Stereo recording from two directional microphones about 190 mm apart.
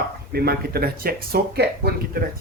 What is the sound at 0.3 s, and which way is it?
A man's voice, 55° right (ahead or behind).